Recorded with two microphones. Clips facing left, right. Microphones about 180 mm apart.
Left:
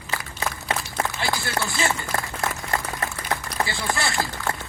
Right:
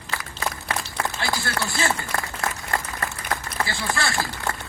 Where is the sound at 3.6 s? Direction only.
25° left (ahead or behind).